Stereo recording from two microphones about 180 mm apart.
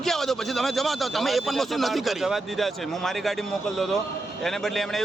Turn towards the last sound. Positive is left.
turn(degrees=0)  # may be behind; listen again after turning